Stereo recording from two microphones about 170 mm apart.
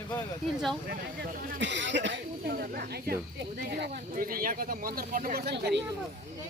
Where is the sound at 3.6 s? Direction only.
65° right (ahead or behind).